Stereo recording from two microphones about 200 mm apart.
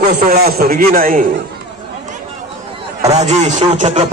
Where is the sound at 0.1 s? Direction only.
50° right (ahead or behind).